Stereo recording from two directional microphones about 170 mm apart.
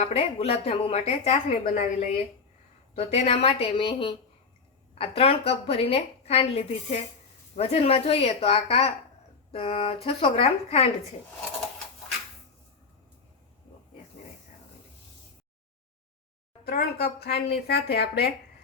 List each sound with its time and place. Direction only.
0.2 s a woman's voice: 35° left (ahead or behind)
1.6 s a woman's voice: 55° left (ahead or behind)
2.9 s a woman's voice: 40° left (ahead or behind)
16.6 s speech: 65° left (ahead or behind)